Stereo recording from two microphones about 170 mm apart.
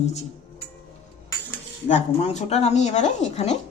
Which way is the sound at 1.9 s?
45° left (ahead or behind).